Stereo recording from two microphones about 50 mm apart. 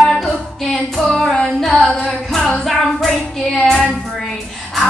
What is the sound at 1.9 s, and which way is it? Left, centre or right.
Singing, centre.